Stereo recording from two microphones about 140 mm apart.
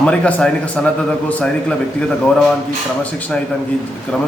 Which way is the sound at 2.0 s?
5° left (ahead or behind).